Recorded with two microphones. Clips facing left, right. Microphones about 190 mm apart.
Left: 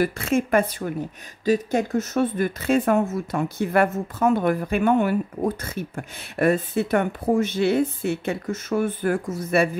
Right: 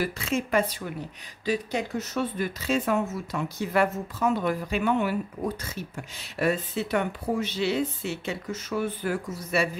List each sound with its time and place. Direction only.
0.0 s speech: 55° left (ahead or behind)